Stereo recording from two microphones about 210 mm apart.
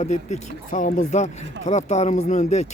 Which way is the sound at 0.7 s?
40° left (ahead or behind).